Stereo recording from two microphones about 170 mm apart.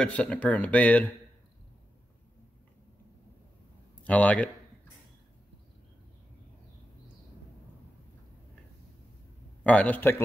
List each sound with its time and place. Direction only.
0.0 s speech: 5° left (ahead or behind)
4.0 s speech: 10° left (ahead or behind)
9.6 s speech: 10° left (ahead or behind)